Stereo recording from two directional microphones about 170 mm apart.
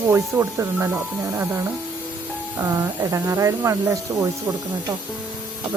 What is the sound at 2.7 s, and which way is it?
Speech, 20° right (ahead or behind).